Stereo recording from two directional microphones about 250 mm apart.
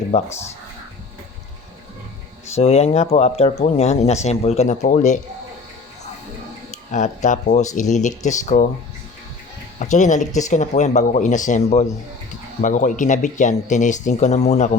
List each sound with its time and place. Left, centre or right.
0.1 s speech: left
2.6 s speech: left
6.7 s speech: left
9.7 s speech: left